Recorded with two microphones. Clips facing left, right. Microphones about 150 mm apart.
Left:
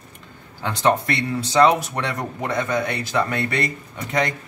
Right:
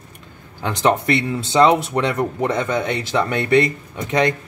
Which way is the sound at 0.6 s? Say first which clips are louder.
Right 2 dB; 20° right (ahead or behind).